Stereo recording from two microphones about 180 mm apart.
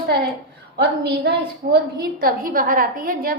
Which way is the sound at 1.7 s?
55° right (ahead or behind).